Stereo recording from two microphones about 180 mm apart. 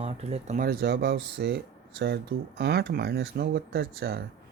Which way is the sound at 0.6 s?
60° right (ahead or behind).